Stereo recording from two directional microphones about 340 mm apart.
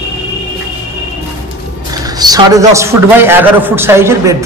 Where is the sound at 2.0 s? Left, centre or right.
Centre.